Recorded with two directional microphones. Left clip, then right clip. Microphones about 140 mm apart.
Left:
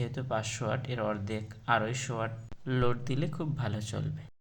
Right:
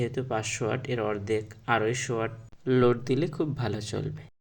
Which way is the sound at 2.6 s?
30° right (ahead or behind).